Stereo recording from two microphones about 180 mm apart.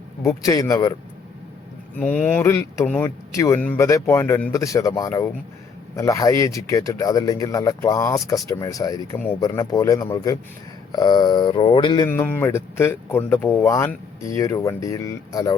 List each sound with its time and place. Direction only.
0.2 s speech: 20° left (ahead or behind)
2.0 s speech: 5° left (ahead or behind)
9.1 s speech: 10° left (ahead or behind); by 12.0 s 25° left (ahead or behind)
12.0 s speech: 10° left (ahead or behind)